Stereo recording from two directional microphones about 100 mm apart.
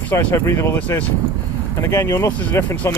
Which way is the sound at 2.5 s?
15° left (ahead or behind).